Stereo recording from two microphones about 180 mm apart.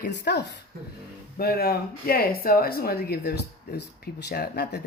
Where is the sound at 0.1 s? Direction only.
70° left (ahead or behind).